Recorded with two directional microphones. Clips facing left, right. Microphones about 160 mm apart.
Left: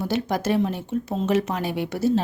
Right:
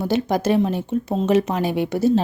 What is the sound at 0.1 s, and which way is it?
Speech, 20° right (ahead or behind).